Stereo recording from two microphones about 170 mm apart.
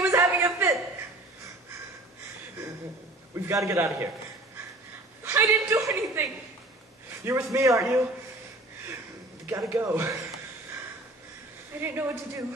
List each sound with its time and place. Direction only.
0.1 s a sound: 15° right (ahead or behind)
3.6 s a woman's voice: 15° right (ahead or behind)
5.2 s a woman's voice: 15° right (ahead or behind)
7.2 s a woman's voice: 15° right (ahead or behind)
9.5 s a woman's voice: 15° right (ahead or behind)
11.8 s a woman's voice: 15° right (ahead or behind)